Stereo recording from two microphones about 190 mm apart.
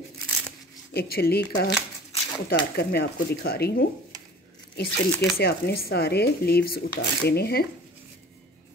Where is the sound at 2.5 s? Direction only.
55° left (ahead or behind).